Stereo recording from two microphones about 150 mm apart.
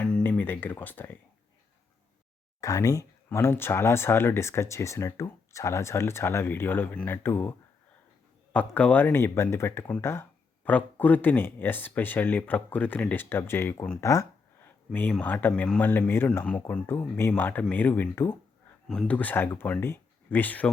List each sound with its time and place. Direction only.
0.0 s speech: 10° left (ahead or behind)
2.6 s speech: 20° left (ahead or behind)
8.5 s speech: 10° left (ahead or behind)
14.0 s a sound: 20° left (ahead or behind)
14.8 s speech: 10° left (ahead or behind)